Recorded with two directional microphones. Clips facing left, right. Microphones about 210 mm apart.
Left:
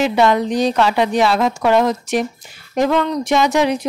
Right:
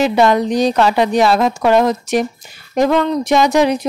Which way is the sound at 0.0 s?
40° right (ahead or behind).